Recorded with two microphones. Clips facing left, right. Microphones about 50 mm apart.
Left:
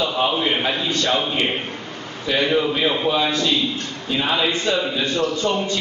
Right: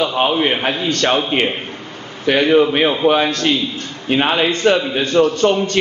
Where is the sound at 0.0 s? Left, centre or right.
Right.